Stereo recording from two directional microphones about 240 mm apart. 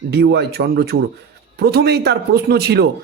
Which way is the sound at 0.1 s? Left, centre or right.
Right.